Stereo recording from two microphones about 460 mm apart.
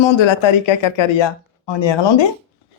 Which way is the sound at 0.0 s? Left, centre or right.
Left.